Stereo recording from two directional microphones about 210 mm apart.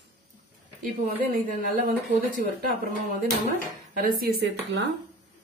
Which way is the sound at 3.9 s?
45° right (ahead or behind).